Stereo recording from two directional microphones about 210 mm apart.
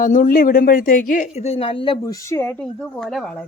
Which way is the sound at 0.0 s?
40° left (ahead or behind).